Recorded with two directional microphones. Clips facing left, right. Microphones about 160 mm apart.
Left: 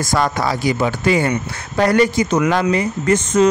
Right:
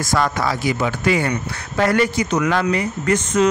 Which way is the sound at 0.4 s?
30° left (ahead or behind).